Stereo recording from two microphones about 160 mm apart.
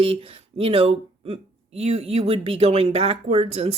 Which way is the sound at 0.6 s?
35° right (ahead or behind).